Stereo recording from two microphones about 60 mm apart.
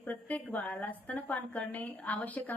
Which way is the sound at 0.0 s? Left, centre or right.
Left.